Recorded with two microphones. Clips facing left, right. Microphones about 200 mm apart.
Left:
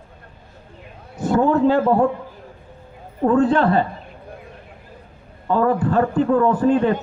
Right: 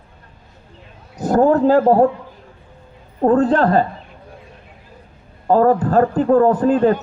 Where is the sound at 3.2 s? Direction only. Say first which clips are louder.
Right 2 dB; 40° right (ahead or behind).